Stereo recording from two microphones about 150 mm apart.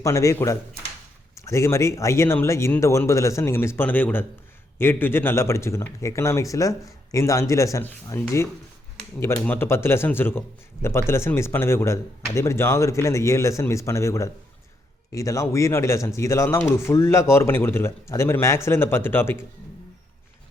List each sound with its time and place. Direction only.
0.0 s speech: 20° left (ahead or behind)
9.2 s speech: 15° left (ahead or behind)